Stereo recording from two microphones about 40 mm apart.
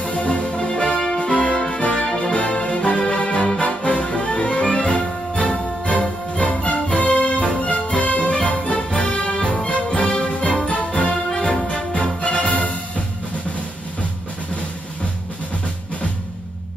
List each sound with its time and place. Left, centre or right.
0.0 s music: left; by 1.2 s centre
1.2 s music: left